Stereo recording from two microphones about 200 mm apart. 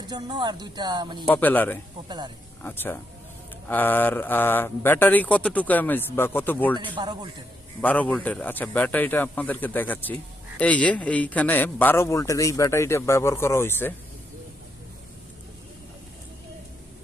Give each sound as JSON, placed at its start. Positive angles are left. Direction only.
{"t": 0.1, "sound": "speech", "side_deg": -20}
{"t": 1.3, "sound": "a man's voice", "side_deg": 10}
{"t": 2.0, "sound": "speech", "side_deg": -20}
{"t": 2.6, "sound": "a man's voice", "side_deg": 10}
{"t": 6.7, "sound": "speech", "side_deg": -25}
{"t": 7.8, "sound": "a man's voice", "side_deg": 5}